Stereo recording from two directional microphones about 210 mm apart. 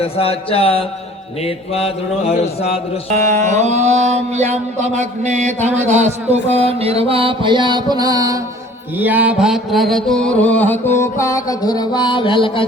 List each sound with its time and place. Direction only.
0.0 s mantra: 25° left (ahead or behind)
3.2 s mantra: 10° left (ahead or behind)
3.5 s mantra: 35° right (ahead or behind); by 12.6 s 25° left (ahead or behind)